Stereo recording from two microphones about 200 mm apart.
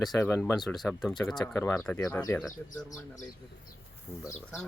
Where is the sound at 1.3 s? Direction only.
15° left (ahead or behind).